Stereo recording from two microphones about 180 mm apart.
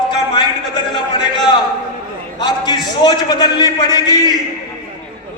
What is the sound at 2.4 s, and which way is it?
A man's voice, 25° left (ahead or behind).